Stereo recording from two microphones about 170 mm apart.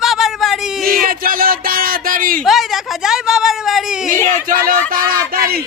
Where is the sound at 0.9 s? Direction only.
60° right (ahead or behind).